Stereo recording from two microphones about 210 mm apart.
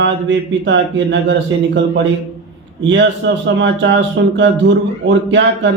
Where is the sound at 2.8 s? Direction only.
60° right (ahead or behind).